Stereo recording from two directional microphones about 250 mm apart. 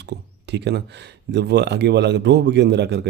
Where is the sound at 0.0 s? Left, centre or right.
Right.